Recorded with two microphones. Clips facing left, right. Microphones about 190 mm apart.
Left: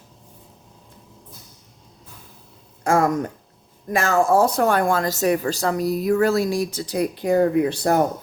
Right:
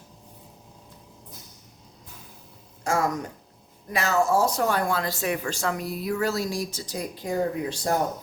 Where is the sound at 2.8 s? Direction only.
55° left (ahead or behind).